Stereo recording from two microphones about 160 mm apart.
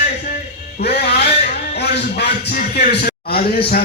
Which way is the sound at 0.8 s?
90° left.